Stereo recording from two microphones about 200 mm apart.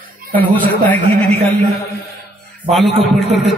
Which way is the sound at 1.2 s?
30° right (ahead or behind).